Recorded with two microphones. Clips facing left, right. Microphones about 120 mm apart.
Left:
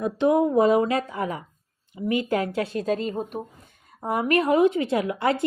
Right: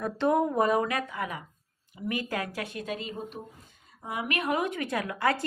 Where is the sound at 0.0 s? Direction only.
15° left (ahead or behind).